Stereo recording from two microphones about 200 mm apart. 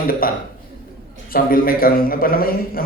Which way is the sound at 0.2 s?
45° left (ahead or behind).